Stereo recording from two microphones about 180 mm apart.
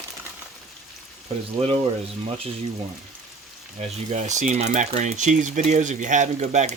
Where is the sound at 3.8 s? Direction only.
40° right (ahead or behind).